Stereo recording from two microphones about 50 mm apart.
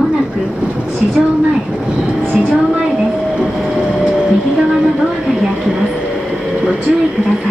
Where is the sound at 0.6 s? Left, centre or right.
Centre.